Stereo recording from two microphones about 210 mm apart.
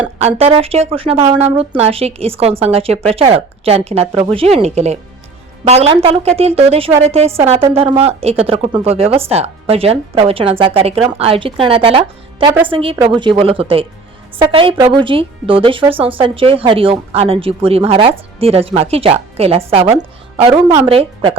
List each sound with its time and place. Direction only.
0.2 s a woman's voice: 30° right (ahead or behind)